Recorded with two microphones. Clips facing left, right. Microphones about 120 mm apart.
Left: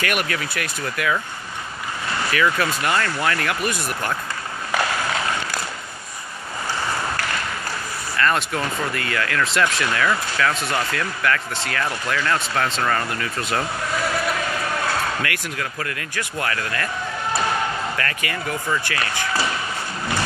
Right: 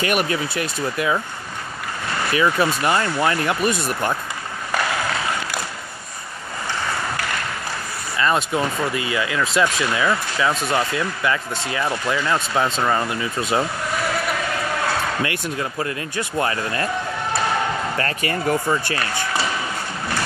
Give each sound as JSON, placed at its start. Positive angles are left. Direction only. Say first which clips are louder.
{"t": 0.0, "sound": "speech", "louder": "right 3 dB", "side_deg": -25}
{"t": 2.3, "sound": "speech", "louder": "right 3 dB", "side_deg": -20}
{"t": 8.2, "sound": "speech", "louder": "right 2 dB", "side_deg": -15}
{"t": 15.2, "sound": "speech", "louder": "right 3 dB", "side_deg": -25}
{"t": 17.9, "sound": "speech", "louder": "right 3 dB", "side_deg": -30}